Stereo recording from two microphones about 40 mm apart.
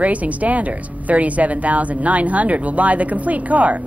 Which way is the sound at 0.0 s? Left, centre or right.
Right.